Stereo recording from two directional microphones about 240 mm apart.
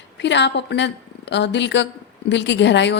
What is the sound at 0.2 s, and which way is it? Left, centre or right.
A woman's voice, left.